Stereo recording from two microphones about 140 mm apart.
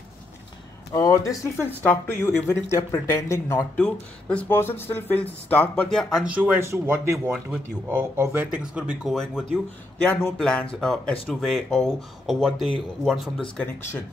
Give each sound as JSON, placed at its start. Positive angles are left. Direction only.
{"t": 0.9, "sound": "speech", "side_deg": 20}
{"t": 3.7, "sound": "speech", "side_deg": 10}
{"t": 6.3, "sound": "speech", "side_deg": -15}